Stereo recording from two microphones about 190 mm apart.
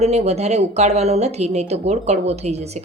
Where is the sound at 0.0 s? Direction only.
35° right (ahead or behind).